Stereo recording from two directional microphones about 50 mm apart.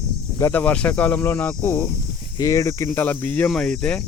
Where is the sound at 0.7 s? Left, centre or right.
Left.